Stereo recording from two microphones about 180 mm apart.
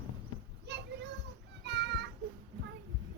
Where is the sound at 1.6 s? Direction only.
70° right (ahead or behind).